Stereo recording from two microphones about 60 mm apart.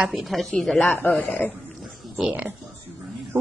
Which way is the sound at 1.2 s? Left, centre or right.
Left.